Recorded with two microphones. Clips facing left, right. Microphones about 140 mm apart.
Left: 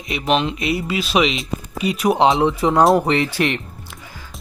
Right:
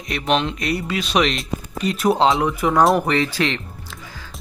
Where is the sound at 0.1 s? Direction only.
5° left (ahead or behind).